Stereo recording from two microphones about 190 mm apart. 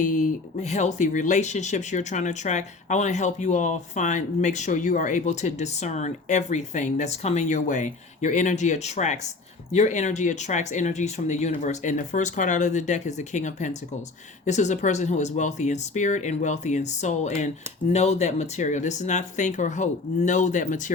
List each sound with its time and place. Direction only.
0.0 s speech: 40° left (ahead or behind)